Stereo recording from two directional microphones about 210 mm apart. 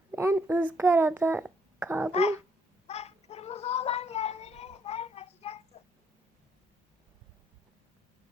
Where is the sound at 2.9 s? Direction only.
30° left (ahead or behind).